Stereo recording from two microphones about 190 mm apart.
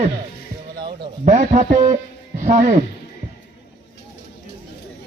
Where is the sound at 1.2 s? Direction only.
40° right (ahead or behind).